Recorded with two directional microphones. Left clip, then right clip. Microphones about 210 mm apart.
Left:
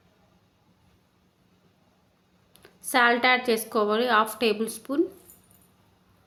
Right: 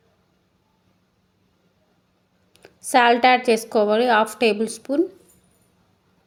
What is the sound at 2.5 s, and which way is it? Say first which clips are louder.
A woman's voice: right 6 dB; 20° right (ahead or behind).